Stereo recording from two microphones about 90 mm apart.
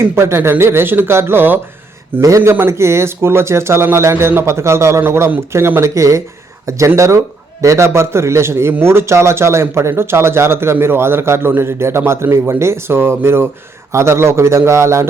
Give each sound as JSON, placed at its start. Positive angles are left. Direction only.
{"t": 0.0, "sound": "a man's voice", "side_deg": -30}